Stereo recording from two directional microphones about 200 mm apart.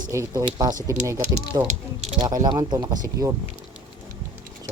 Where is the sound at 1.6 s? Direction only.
35° right (ahead or behind).